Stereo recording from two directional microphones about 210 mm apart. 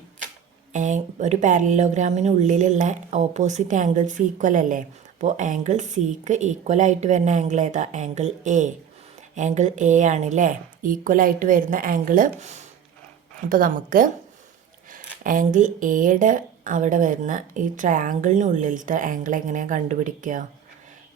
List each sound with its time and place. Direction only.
0.7 s speech: 35° right (ahead or behind)